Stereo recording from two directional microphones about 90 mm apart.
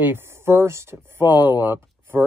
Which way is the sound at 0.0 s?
25° right (ahead or behind).